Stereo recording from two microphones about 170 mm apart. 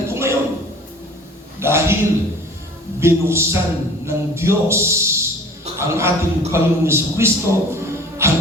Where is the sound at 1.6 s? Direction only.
15° right (ahead or behind).